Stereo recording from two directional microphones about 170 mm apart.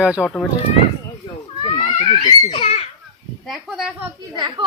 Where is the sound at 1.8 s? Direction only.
45° left (ahead or behind).